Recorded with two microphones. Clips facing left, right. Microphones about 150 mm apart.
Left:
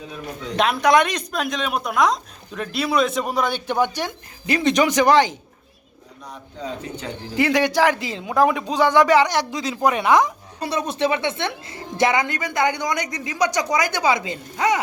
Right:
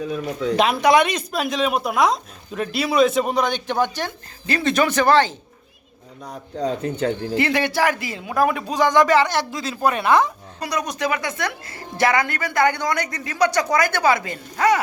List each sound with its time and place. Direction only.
0.5 s speech: centre (ahead or behind); by 5.4 s 15° left (ahead or behind)
6.6 s speech: 45° right (ahead or behind)
7.3 s speech: 15° left (ahead or behind)
8.4 s speech: 5° right (ahead or behind)
8.9 s speech: 15° left (ahead or behind)
10.6 s a woman's voice: 30° left (ahead or behind)